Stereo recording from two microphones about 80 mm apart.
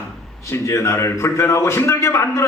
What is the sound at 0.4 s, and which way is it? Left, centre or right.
A man's voice, left.